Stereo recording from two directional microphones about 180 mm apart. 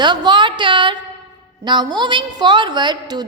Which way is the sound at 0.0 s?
25° right (ahead or behind).